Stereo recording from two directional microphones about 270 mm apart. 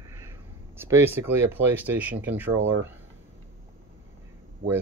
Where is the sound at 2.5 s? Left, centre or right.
Right.